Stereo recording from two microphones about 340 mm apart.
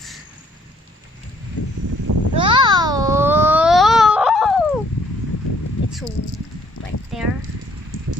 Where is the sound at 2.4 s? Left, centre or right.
Centre.